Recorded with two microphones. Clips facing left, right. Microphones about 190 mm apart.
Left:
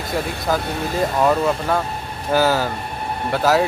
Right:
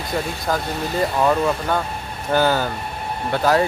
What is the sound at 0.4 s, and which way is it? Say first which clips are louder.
Speech: left 1 dB; centre (ahead or behind).